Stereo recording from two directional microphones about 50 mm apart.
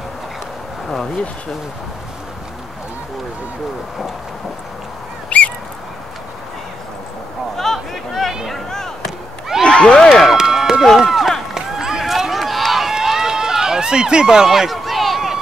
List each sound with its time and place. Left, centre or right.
5.3 s goose: left
7.5 s a sound: centre
8.5 s chop: centre
9.6 s speech: centre
10.2 s a sound: centre
11.0 s run: centre